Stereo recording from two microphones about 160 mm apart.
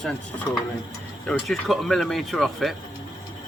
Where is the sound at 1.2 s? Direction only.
Centre (ahead or behind).